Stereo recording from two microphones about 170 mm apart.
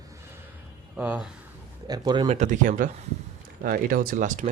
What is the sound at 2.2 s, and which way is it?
Speech, 45° right (ahead or behind).